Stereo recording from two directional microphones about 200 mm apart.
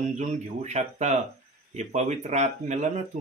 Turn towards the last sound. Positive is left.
turn(degrees=-35)  # may be behind; listen again after turning